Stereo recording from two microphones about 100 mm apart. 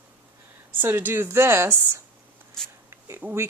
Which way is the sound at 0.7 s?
20° right (ahead or behind).